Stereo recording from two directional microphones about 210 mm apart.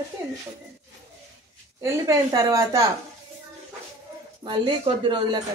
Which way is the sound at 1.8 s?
15° right (ahead or behind).